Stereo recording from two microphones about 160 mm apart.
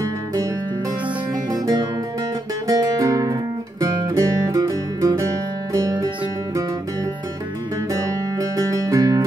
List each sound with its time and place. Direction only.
0.0 s music: 20° right (ahead or behind)
7.9 s music: 20° right (ahead or behind)